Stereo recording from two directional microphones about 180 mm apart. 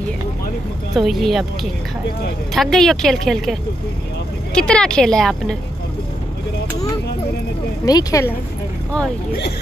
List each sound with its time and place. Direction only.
0.9 s a woman's voice: centre (ahead or behind)
4.6 s a woman's voice: 5° left (ahead or behind)
7.8 s speech: 20° left (ahead or behind)